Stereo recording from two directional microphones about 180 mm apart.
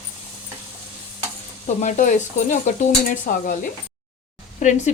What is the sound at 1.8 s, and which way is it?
Stir, 45° left (ahead or behind).